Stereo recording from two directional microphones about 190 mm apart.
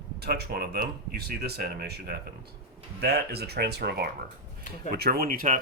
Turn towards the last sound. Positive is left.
turn(degrees=-45)  # may be behind; listen again after turning